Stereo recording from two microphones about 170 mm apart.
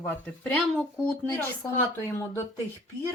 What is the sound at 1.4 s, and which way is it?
A woman's voice, 15° left (ahead or behind).